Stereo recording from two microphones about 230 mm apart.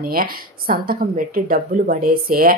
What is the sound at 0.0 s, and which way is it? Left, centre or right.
Speech, right.